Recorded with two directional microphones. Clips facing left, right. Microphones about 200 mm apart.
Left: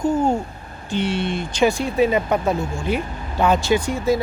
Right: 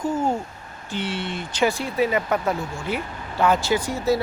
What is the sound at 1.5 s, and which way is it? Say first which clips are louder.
Speech: left 4 dB; 15° left (ahead or behind).